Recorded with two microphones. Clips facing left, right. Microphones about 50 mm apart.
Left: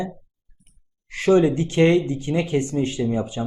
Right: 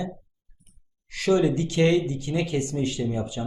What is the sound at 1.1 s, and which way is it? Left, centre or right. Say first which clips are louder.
Speech: left 4 dB; left.